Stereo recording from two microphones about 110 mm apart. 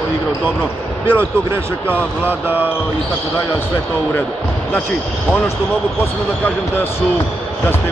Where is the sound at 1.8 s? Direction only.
15° right (ahead or behind).